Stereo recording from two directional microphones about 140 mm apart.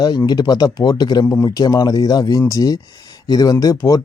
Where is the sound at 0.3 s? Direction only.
30° left (ahead or behind).